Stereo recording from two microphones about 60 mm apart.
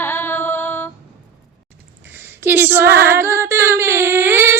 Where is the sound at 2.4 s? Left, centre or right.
Right.